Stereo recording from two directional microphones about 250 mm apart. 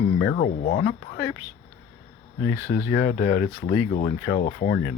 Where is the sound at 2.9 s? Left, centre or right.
Left.